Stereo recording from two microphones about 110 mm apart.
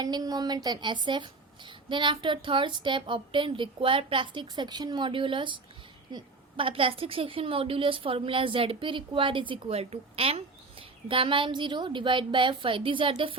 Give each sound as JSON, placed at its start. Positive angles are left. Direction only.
{"t": 0.0, "sound": "a woman's voice", "side_deg": -35}